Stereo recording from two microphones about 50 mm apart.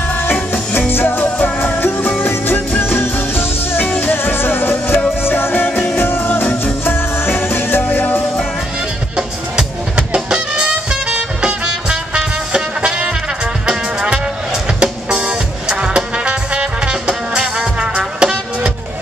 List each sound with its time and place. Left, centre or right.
0.1 s music: left
9.1 s music: centre